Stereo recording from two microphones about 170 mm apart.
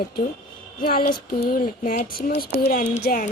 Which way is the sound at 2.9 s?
70° left (ahead or behind).